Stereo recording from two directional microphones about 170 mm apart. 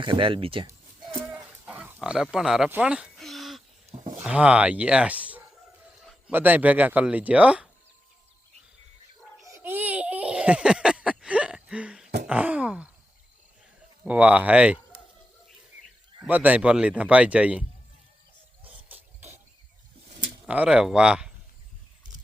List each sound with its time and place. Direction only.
0.0 s speech: 30° right (ahead or behind)
1.3 s a sound: 10° right (ahead or behind)
4.2 s a man's voice: 5° right (ahead or behind)
9.5 s a sound: 15° right (ahead or behind)
12.3 s a man's voice: 10° right (ahead or behind)
14.0 s a man's voice: 10° right (ahead or behind)
16.2 s a man's voice: 10° right (ahead or behind)
20.5 s speech: 5° right (ahead or behind)